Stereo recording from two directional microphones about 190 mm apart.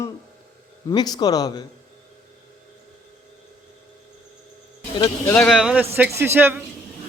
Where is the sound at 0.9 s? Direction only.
25° left (ahead or behind).